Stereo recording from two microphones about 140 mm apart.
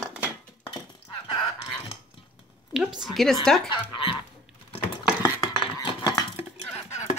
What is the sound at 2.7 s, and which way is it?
Speech, 5° right (ahead or behind).